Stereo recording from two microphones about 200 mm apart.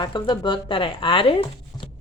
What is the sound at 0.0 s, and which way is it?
Speech, 25° left (ahead or behind).